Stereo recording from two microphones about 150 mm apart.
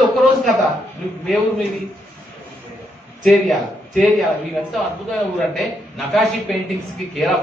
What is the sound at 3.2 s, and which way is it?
Speech, centre (ahead or behind).